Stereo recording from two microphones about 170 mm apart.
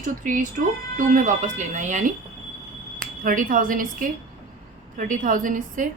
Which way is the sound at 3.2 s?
55° right (ahead or behind).